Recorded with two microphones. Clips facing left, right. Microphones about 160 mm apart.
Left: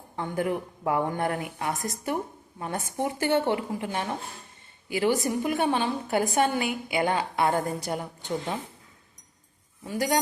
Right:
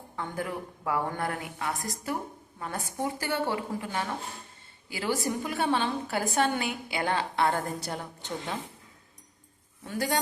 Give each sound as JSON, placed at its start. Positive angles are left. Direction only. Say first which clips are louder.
{"t": 0.2, "sound": "a woman's voice", "louder": "left 6 dB", "side_deg": 20}
{"t": 9.8, "sound": "a woman's voice", "louder": "left 3 dB", "side_deg": 10}